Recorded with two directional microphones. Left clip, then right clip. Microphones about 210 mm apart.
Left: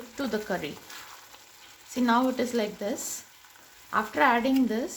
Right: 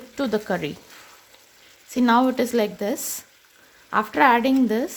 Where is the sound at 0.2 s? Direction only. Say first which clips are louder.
Right 6 dB; 30° right (ahead or behind).